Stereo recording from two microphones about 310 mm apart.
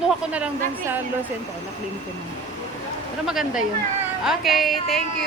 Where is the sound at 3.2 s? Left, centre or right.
Centre.